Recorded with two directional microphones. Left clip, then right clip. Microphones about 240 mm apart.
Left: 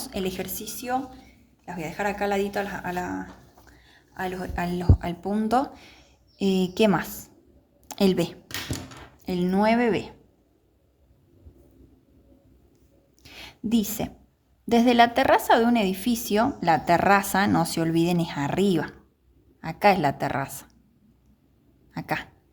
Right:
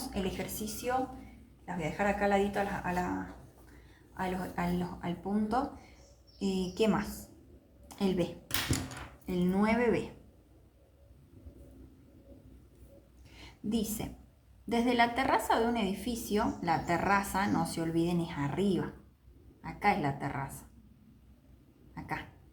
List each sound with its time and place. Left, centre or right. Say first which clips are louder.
0.0 s a woman's voice: left 6 dB; left
4.2 s a woman's voice: left 5 dB; left
13.2 s a sound: left 7 dB; left
14.7 s a woman's voice: left 10 dB; left
21.9 s a woman's voice: left 10 dB; left